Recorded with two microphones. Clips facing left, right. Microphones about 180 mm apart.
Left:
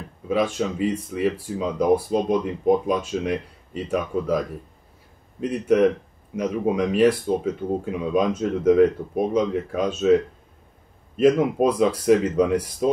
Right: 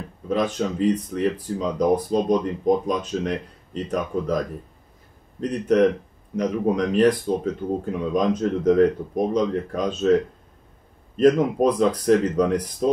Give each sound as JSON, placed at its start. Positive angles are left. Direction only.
{"t": 0.3, "sound": "speech", "side_deg": 5}
{"t": 11.1, "sound": "speech", "side_deg": 5}